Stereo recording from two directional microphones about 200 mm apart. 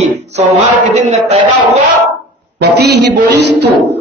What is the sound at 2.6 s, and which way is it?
A woman's voice, 55° right (ahead or behind).